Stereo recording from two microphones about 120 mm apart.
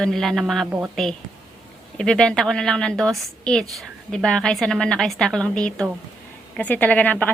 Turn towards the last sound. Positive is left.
turn(degrees=10)  # may be behind; listen again after turning